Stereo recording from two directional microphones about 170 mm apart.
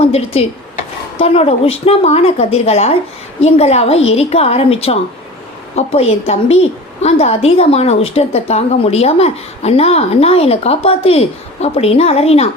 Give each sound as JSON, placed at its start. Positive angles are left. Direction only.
{"t": 0.0, "sound": "a woman's voice", "side_deg": 35}